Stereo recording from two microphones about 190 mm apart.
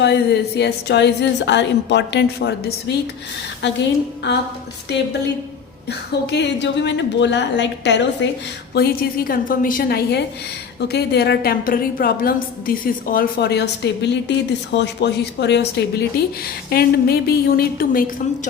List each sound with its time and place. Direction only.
0.0 s a woman's voice: 60° left (ahead or behind)
8.7 s a woman's voice: 55° left (ahead or behind)